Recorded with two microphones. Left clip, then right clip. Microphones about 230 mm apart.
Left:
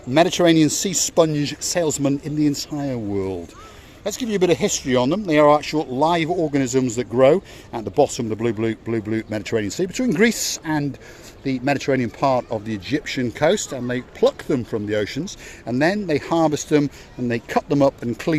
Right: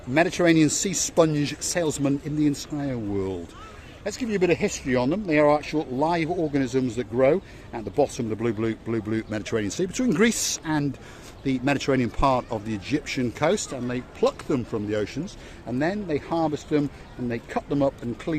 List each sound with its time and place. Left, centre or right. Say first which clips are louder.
0.1 s speech: left 5 dB; left